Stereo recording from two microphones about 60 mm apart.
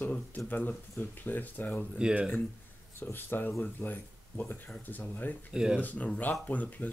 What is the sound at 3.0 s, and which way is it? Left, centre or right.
Speech, left.